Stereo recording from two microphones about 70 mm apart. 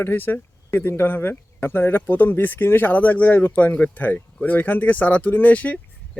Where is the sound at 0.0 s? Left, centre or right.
Left.